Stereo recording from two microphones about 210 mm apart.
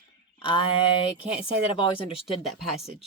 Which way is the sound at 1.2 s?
25° left (ahead or behind).